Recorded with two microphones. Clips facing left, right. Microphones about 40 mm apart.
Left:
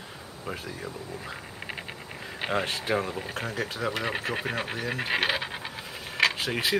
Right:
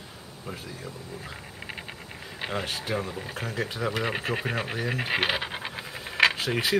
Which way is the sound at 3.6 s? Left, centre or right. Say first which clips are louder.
Right 3 dB; centre.